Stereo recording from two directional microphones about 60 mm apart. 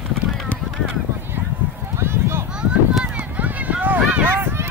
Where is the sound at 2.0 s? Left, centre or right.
Right.